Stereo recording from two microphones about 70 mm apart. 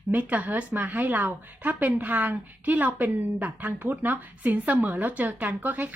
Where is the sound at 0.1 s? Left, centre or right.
Right.